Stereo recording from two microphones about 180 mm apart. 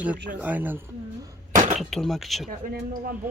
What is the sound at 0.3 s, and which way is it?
Speech, 10° right (ahead or behind).